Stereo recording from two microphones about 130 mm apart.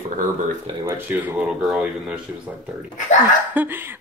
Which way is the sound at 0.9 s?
15° right (ahead or behind).